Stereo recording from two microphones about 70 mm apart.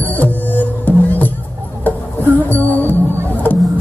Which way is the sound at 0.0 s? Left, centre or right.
Left.